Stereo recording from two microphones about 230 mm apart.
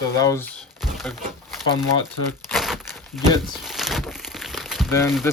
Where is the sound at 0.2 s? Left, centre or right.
Centre.